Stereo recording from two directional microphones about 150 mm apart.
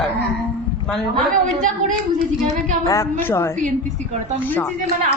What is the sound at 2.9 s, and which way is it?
Speech, 20° left (ahead or behind).